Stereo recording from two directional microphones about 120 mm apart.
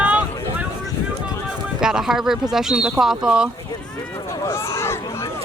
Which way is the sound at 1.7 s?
5° right (ahead or behind).